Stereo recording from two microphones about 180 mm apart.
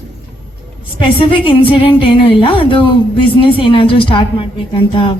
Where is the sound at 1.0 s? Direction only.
30° left (ahead or behind).